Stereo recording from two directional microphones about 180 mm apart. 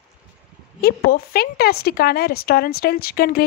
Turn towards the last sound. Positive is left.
turn(degrees=60)  # may be behind; listen again after turning